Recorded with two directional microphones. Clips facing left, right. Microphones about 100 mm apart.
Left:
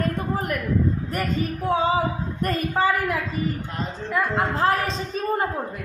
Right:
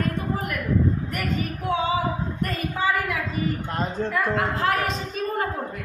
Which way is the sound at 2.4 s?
45° left (ahead or behind).